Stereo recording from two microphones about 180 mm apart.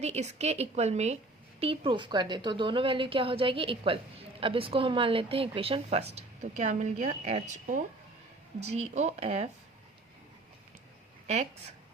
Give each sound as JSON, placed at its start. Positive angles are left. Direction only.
{"t": 0.0, "sound": "a woman's voice", "side_deg": -35}